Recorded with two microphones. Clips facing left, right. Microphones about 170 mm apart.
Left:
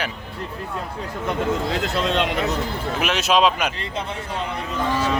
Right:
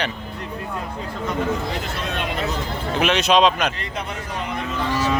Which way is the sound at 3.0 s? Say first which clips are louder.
Right 2 dB; 5° left (ahead or behind).